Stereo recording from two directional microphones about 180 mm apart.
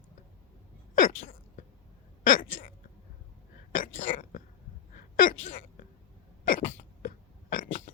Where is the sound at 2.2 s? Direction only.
50° left (ahead or behind).